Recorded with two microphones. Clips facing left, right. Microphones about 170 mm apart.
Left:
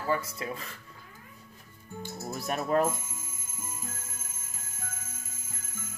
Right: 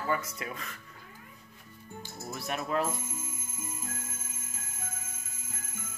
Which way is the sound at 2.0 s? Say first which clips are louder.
Left 3 dB; 40° left (ahead or behind).